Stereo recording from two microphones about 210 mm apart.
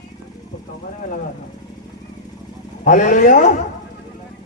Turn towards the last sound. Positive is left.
turn(degrees=35)  # may be behind; listen again after turning